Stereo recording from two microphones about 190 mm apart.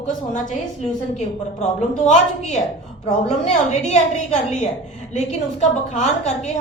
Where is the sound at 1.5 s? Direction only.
40° left (ahead or behind).